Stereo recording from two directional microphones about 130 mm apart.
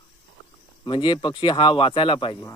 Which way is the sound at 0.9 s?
40° left (ahead or behind).